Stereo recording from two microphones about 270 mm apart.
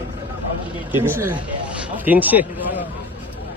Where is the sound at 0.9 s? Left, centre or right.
Centre.